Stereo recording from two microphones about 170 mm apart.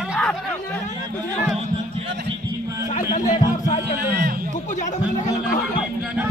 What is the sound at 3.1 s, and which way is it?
Music, 25° left (ahead or behind).